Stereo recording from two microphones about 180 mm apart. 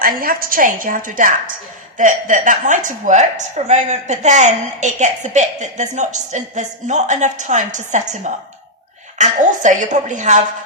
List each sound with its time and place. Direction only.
0.0 s a woman's voice: 55° right (ahead or behind)